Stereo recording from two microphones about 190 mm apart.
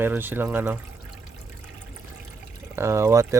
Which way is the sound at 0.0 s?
10° right (ahead or behind).